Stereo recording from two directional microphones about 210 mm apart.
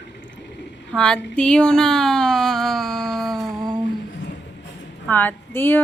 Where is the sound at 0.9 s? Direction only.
5° left (ahead or behind).